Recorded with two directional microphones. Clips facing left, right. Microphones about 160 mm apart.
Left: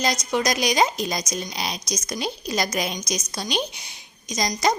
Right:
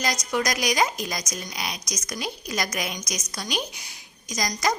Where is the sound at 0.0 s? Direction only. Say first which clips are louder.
Left 3 dB; 25° left (ahead or behind).